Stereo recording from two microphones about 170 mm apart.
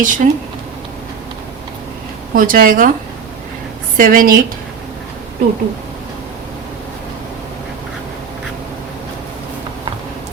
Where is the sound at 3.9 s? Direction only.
55° right (ahead or behind).